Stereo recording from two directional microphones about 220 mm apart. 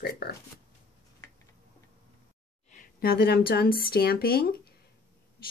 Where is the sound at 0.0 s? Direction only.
45° left (ahead or behind).